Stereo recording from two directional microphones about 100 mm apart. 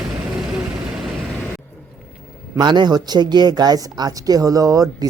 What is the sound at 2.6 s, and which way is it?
Speech, 50° right (ahead or behind).